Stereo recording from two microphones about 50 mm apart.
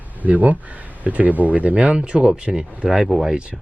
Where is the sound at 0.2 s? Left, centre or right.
Right.